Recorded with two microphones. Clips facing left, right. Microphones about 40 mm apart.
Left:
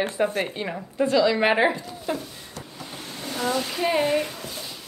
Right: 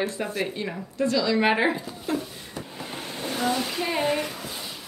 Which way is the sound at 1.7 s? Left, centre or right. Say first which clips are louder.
Even; centre.